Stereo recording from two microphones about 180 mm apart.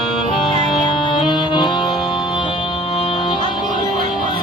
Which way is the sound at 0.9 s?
30° left (ahead or behind).